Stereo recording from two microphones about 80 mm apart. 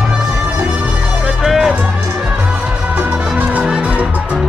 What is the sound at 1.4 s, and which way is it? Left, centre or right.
Music, centre.